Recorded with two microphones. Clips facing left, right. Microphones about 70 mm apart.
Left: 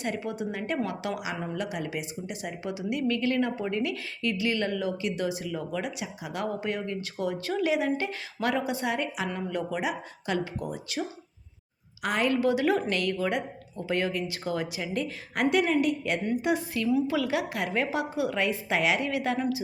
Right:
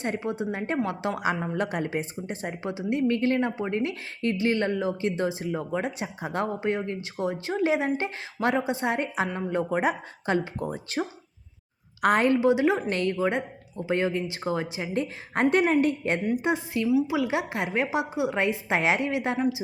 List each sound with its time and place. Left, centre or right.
0.0 s speech: right
1.2 s speech: right
12.0 s speech: right
12.3 s speech: right
16.8 s speech: centre